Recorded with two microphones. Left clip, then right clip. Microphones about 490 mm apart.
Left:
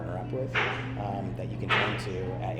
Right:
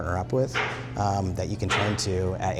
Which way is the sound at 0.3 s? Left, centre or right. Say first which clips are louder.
Right 9 dB; right.